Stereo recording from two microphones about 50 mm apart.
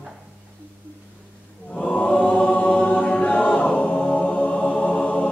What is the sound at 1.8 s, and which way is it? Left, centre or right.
Choir, left.